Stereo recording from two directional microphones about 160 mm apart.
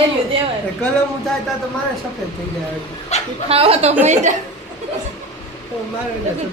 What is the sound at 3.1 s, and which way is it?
Speech, 45° left (ahead or behind).